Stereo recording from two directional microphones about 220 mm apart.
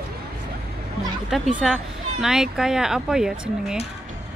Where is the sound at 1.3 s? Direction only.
Centre (ahead or behind).